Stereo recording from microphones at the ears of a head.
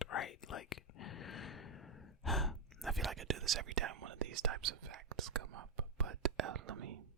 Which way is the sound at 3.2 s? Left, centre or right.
Right.